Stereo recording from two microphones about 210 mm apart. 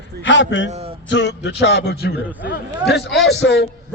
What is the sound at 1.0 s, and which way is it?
A man's voice, 55° left (ahead or behind).